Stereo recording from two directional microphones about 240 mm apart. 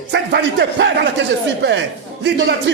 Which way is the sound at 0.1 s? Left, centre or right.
Right.